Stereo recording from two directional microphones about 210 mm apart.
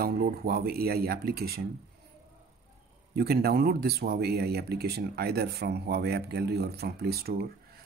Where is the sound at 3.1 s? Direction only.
50° right (ahead or behind).